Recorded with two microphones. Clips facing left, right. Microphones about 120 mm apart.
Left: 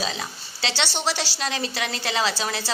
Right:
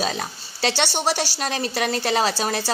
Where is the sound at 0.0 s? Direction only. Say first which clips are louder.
Right 4 dB; 50° right (ahead or behind).